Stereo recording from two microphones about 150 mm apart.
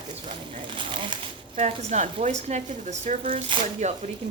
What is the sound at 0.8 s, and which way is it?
Speech, 35° right (ahead or behind).